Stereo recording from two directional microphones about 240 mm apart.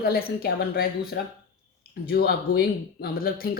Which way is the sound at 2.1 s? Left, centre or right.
Left.